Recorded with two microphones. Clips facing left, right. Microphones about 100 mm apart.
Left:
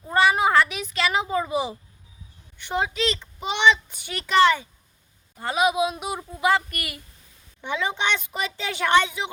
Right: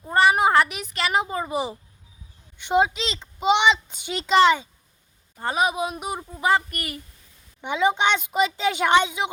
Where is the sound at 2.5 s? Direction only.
20° right (ahead or behind).